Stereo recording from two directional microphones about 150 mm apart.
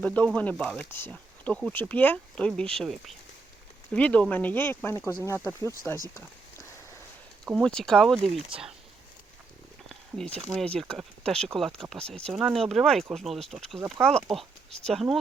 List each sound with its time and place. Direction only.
0.0 s speech: 10° left (ahead or behind)
7.4 s speech: 5° left (ahead or behind)
10.3 s speech: 5° left (ahead or behind)